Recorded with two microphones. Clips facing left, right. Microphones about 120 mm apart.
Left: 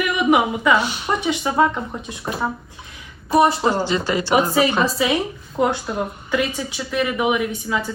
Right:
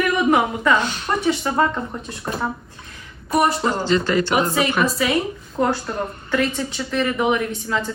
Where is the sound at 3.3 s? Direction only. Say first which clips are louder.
Left 3 dB; 30° left (ahead or behind).